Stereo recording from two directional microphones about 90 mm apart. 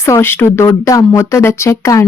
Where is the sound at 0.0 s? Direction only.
30° left (ahead or behind).